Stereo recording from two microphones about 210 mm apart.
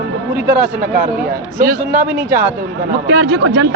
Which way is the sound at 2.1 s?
10° right (ahead or behind).